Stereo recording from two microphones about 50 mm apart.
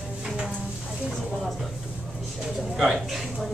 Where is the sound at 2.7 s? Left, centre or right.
Centre.